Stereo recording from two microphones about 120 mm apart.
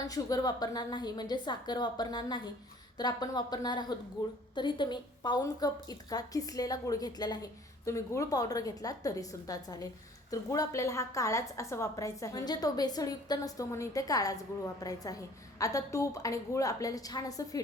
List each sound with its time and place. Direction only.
0.1 s a woman's voice: 35° left (ahead or behind)